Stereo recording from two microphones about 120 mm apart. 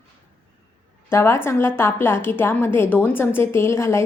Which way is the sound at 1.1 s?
20° left (ahead or behind).